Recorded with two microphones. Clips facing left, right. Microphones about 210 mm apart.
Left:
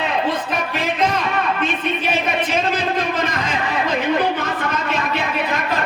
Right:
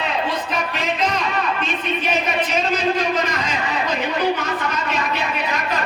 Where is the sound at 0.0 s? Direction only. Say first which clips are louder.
Left 2 dB; 55° left (ahead or behind).